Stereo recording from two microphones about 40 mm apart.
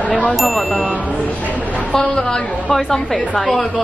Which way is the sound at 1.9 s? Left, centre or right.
Centre.